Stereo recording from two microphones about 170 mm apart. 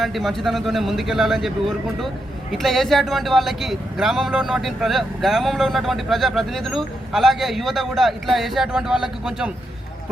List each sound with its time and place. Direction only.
0.0 s speech: centre (ahead or behind)